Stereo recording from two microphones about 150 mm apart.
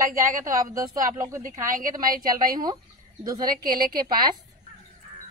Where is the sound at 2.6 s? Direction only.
25° right (ahead or behind).